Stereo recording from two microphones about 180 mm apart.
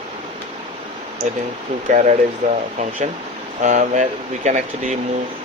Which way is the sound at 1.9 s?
40° right (ahead or behind).